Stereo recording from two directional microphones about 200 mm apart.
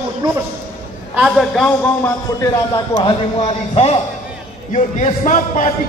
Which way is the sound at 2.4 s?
25° left (ahead or behind).